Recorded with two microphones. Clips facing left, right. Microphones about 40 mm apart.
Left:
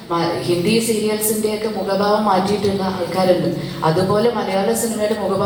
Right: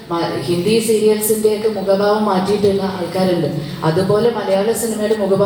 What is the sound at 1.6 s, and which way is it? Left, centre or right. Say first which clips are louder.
A man's voice: right 4 dB; centre.